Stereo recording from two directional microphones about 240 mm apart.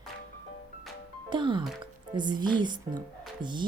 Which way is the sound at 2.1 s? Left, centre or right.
Centre.